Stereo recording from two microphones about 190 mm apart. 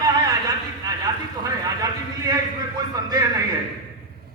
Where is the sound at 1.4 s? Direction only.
20° right (ahead or behind).